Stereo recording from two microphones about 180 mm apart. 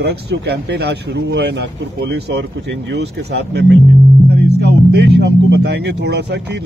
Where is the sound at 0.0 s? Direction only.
65° right (ahead or behind).